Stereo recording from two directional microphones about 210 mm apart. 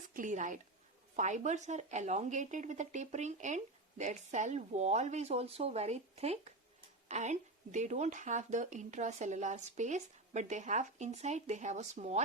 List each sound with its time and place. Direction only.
0.1 s speech: 40° right (ahead or behind)